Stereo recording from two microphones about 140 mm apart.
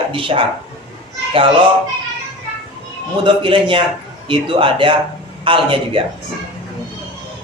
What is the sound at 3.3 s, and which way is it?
Speech, 35° right (ahead or behind).